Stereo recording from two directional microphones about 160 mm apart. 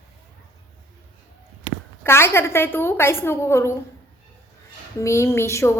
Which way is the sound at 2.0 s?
15° left (ahead or behind).